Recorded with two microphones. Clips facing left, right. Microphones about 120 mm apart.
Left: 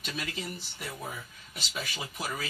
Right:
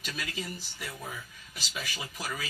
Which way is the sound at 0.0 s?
35° left (ahead or behind).